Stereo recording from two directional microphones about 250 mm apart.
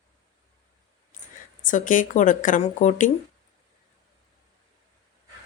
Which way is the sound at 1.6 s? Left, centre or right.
Left.